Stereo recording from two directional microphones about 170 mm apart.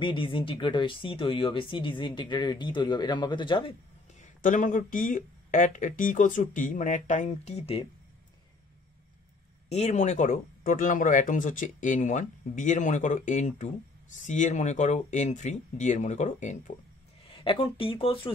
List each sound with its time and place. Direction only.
0.0 s speech: 30° left (ahead or behind)
4.4 s speech: 50° left (ahead or behind)
9.7 s speech: 40° left (ahead or behind)
17.4 s speech: 30° left (ahead or behind)